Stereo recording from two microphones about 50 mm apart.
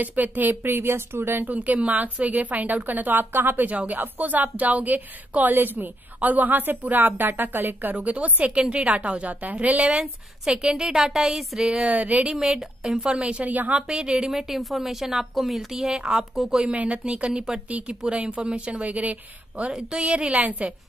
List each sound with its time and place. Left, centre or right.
0.0 s speech: right
1.4 s a woman's voice: right; by 11.8 s centre
11.8 s speech: right
12.8 s speech: centre; by 13.7 s right
13.7 s speech: centre
14.3 s speech: centre; by 20.7 s right